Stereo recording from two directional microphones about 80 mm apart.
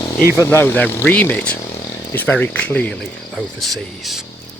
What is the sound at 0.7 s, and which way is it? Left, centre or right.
Speech, centre.